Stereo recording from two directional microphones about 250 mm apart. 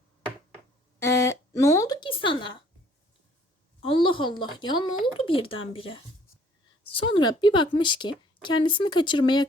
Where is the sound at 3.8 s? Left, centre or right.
Centre.